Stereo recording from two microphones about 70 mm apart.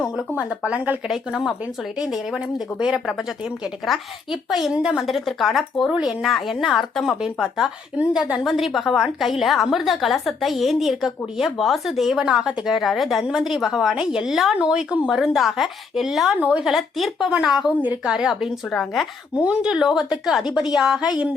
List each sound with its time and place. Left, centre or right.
0.3 s speech: centre
1.0 s a woman's voice: centre
5.9 s speech: centre
6.2 s a woman's voice: centre
18.7 s a woman's voice: centre
19.4 s speech: centre